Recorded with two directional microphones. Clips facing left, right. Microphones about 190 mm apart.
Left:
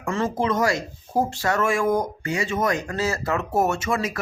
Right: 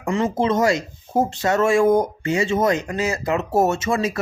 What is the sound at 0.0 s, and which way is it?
Speech, 20° right (ahead or behind).